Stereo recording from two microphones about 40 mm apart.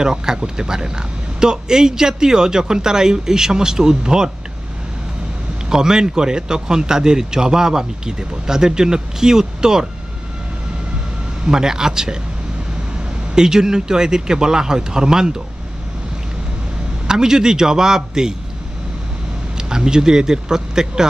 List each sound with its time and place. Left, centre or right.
0.0 s speech: centre
5.6 s speech: centre
11.4 s speech: centre
13.3 s speech: centre
17.1 s speech: centre
19.5 s speech: centre